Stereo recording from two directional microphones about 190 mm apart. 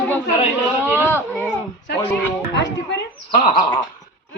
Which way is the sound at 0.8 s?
10° right (ahead or behind).